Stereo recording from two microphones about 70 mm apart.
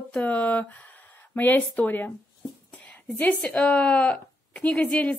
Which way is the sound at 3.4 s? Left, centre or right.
Left.